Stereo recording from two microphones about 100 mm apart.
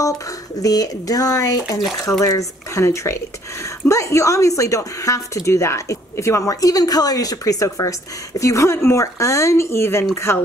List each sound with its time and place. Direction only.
0.6 s a woman's voice: 35° left (ahead or behind)